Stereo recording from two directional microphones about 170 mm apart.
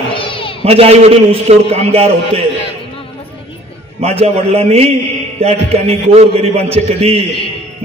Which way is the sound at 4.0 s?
35° right (ahead or behind).